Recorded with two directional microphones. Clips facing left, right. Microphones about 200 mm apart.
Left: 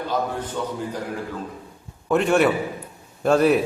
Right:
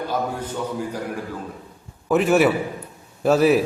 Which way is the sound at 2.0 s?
5° right (ahead or behind).